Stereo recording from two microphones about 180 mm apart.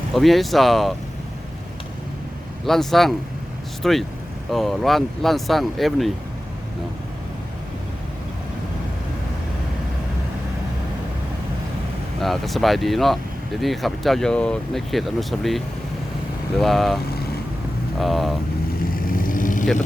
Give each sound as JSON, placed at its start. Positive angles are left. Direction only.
{"t": 0.1, "sound": "speech", "side_deg": 0}
{"t": 2.6, "sound": "speech", "side_deg": 0}
{"t": 12.2, "sound": "speech", "side_deg": 0}
{"t": 18.0, "sound": "speech", "side_deg": 0}
{"t": 18.8, "sound": "vehicle", "side_deg": 50}